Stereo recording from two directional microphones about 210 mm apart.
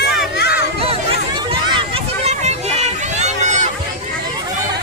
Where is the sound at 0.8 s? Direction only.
25° right (ahead or behind).